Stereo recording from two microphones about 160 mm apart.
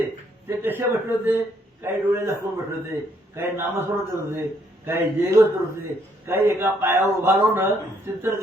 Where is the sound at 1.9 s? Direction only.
15° right (ahead or behind).